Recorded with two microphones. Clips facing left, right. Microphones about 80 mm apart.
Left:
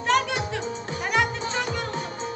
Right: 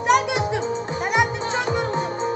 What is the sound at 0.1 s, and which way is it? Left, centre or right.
Music, centre.